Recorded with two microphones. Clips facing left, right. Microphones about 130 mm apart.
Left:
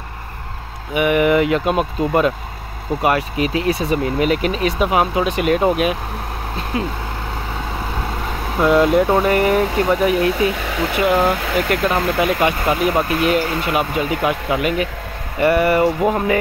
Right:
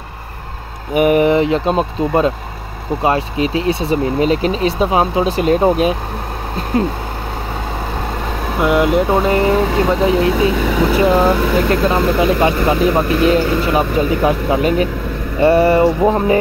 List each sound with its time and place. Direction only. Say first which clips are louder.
0.9 s speech: right 3 dB; 40° right (ahead or behind)
8.5 s speech: even; 20° right (ahead or behind)